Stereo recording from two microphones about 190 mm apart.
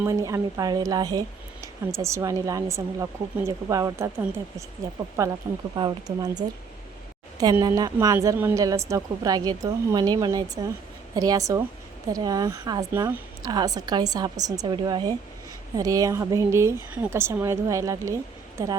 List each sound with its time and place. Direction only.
0.0 s speech: 15° right (ahead or behind)
5.2 s a woman's voice: 15° right (ahead or behind)